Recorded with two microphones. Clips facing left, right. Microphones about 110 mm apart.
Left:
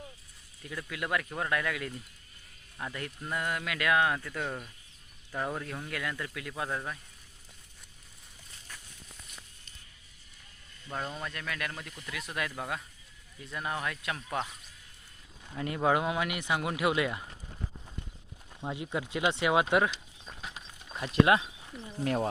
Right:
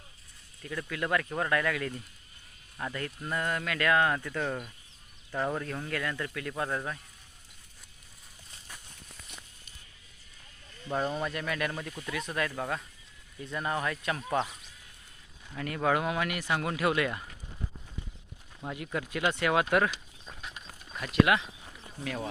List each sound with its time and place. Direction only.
0.6 s speech: 10° left (ahead or behind)
11.2 s speech: 5° right (ahead or behind)
14.3 s speech: 10° right (ahead or behind)
15.5 s speech: 20° left (ahead or behind)
18.6 s speech: 25° left (ahead or behind)
20.9 s speech: 25° left (ahead or behind)
22.0 s speech: 40° left (ahead or behind)